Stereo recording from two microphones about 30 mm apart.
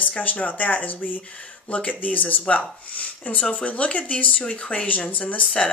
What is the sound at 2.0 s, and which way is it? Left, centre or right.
Speech, left.